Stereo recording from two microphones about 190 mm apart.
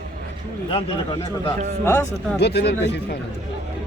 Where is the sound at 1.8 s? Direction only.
15° left (ahead or behind).